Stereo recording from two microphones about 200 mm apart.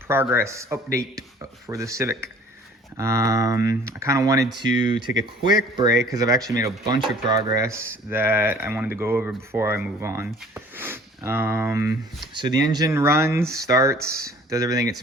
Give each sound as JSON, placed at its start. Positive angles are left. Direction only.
{"t": 0.1, "sound": "speech", "side_deg": -10}